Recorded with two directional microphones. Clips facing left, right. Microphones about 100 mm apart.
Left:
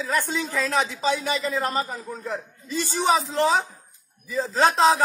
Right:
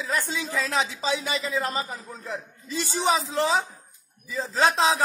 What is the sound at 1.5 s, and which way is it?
Speech, 40° left (ahead or behind).